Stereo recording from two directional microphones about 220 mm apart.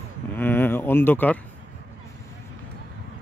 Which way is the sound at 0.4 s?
10° left (ahead or behind).